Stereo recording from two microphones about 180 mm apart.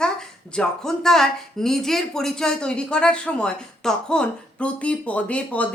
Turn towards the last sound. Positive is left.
turn(degrees=5)  # may be behind; listen again after turning